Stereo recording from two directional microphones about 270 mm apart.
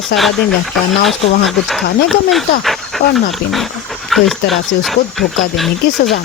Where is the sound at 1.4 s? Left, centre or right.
Centre.